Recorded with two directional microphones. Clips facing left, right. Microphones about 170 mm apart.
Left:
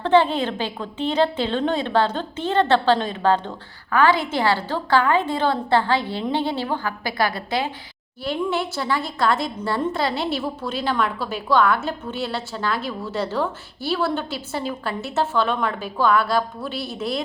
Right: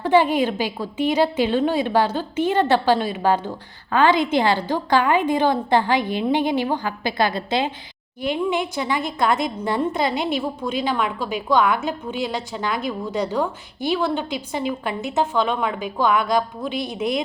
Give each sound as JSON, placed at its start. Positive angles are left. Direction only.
{"t": 0.0, "sound": "a woman's voice", "side_deg": -10}
{"t": 3.9, "sound": "a woman's voice", "side_deg": -20}